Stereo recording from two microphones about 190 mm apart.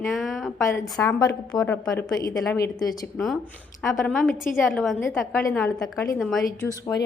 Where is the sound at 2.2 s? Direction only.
15° left (ahead or behind).